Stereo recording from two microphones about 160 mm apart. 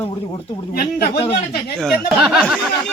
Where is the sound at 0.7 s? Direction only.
75° left (ahead or behind).